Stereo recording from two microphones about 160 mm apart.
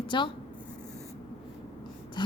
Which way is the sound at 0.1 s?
30° left (ahead or behind).